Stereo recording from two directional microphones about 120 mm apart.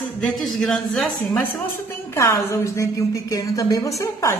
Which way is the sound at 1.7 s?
20° left (ahead or behind).